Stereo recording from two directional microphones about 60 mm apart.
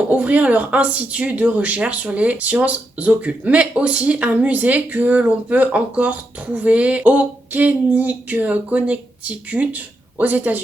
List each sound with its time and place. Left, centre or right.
0.1 s speech: right